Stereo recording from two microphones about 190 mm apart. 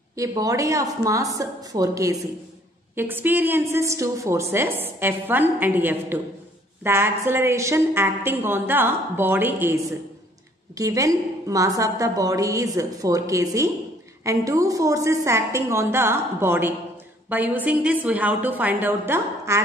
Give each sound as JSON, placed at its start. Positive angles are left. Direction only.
{"t": 0.1, "sound": "a woman's voice", "side_deg": -20}